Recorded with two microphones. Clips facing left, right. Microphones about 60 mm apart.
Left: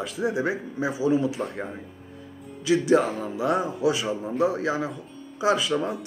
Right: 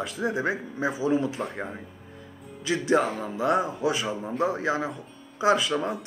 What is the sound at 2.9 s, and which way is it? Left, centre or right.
Speech, centre.